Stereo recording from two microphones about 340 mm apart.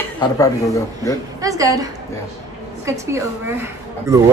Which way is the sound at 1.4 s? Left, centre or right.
Centre.